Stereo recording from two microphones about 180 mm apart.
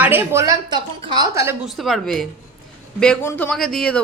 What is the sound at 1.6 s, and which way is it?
Speech, centre (ahead or behind).